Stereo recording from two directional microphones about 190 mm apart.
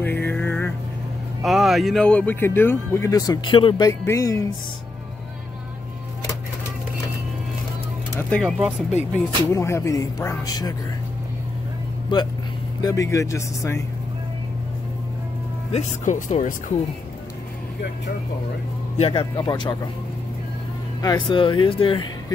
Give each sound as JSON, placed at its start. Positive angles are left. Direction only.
{"t": 0.0, "sound": "a sound", "side_deg": 10}
{"t": 1.4, "sound": "speech", "side_deg": 0}
{"t": 8.1, "sound": "speech", "side_deg": 10}
{"t": 9.5, "sound": "speech", "side_deg": 15}
{"t": 12.8, "sound": "speech", "side_deg": 15}
{"t": 15.7, "sound": "speech", "side_deg": 40}
{"t": 18.9, "sound": "speech", "side_deg": 30}
{"t": 21.0, "sound": "speech", "side_deg": 20}